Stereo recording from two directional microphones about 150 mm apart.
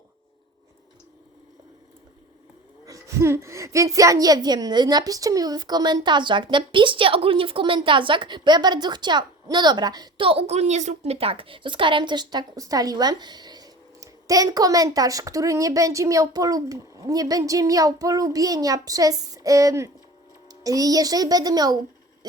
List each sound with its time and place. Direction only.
2.8 s a woman's voice: 20° right (ahead or behind)